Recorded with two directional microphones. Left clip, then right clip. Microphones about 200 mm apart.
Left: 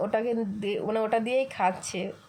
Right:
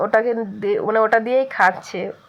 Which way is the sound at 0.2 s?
50° right (ahead or behind).